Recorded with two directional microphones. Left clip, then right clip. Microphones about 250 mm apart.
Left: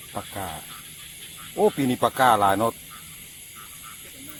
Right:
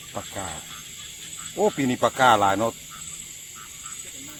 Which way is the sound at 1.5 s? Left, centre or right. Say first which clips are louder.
Left 1 dB; left.